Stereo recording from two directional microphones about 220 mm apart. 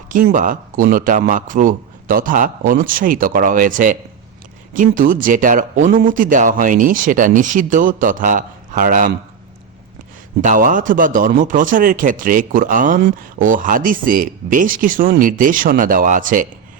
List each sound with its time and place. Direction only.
0.1 s a man's voice: 40° right (ahead or behind)
10.4 s a man's voice: 35° right (ahead or behind)